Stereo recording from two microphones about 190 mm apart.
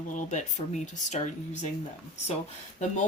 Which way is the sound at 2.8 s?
40° left (ahead or behind).